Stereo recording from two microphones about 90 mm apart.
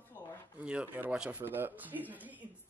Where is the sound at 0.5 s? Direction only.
15° right (ahead or behind).